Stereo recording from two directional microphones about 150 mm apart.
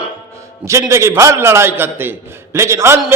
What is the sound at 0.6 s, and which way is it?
A man's voice, 20° right (ahead or behind).